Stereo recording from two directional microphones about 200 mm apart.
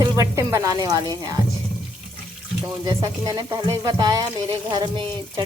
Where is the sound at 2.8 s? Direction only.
20° right (ahead or behind).